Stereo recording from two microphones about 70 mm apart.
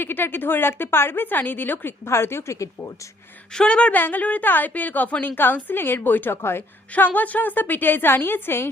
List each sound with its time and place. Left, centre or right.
0.0 s a woman's voice: left
2.0 s a woman's voice: left
3.5 s a woman's voice: centre; by 6.6 s left
6.9 s a woman's voice: left